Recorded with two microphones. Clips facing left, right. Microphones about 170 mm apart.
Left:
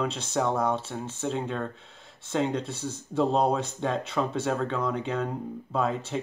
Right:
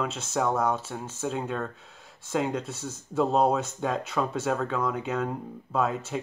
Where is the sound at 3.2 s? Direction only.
5° right (ahead or behind).